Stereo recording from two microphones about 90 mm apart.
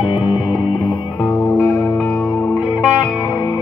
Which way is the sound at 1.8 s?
25° left (ahead or behind).